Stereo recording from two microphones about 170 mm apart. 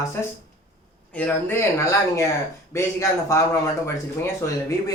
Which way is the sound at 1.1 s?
10° left (ahead or behind).